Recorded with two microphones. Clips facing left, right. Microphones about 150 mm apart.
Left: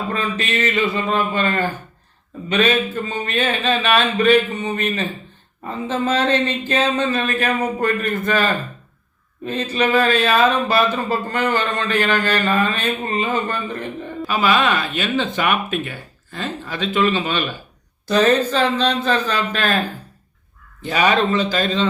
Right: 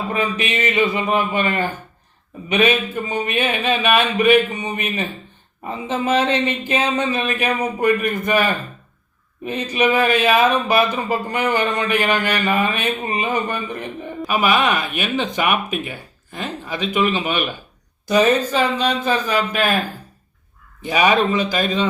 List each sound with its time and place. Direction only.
0.1 s speech: 15° right (ahead or behind)
20.8 s speech: 10° right (ahead or behind)